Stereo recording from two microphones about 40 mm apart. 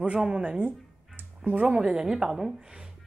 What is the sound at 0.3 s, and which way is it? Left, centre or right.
Speech, right.